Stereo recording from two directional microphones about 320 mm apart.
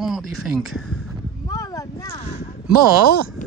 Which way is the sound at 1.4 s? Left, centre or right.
Centre.